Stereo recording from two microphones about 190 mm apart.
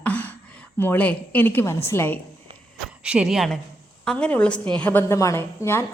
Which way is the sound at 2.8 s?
5° right (ahead or behind).